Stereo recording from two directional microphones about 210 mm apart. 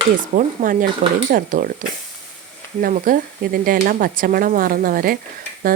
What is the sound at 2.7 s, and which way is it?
Speech, 40° right (ahead or behind).